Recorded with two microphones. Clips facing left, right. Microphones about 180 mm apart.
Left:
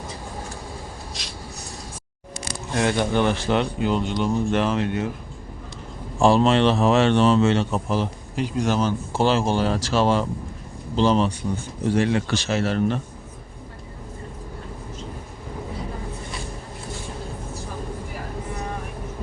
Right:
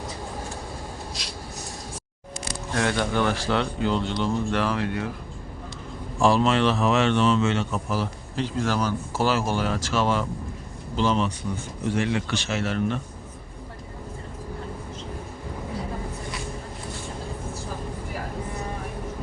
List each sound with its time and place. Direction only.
2.7 s speech: 20° left (ahead or behind)
6.1 s speech: 30° left (ahead or behind)